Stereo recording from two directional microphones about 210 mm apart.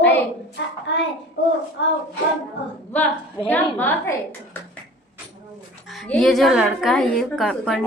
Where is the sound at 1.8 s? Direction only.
60° left (ahead or behind).